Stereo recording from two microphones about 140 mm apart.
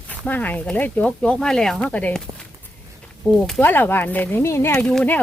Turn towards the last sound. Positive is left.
turn(degrees=10)  # may be behind; listen again after turning